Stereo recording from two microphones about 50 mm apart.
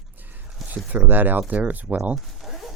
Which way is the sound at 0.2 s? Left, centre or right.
Right.